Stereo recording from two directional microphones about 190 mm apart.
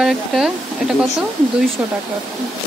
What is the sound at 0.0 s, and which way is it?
Speech, 5° right (ahead or behind).